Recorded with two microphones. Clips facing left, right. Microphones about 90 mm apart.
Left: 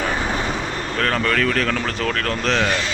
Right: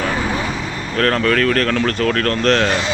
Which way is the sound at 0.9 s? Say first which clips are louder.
Right 5 dB; centre (ahead or behind).